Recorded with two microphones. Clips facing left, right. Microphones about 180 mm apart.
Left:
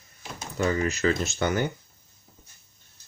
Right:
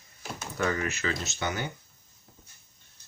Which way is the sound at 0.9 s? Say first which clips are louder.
Left 8 dB; 45° left (ahead or behind).